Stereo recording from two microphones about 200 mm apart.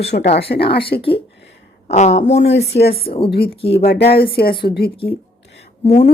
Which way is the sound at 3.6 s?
30° left (ahead or behind).